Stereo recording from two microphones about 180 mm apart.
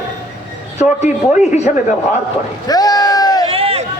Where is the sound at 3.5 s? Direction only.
30° right (ahead or behind).